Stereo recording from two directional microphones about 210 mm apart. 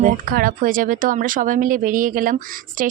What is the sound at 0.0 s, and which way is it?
Speech, 40° right (ahead or behind).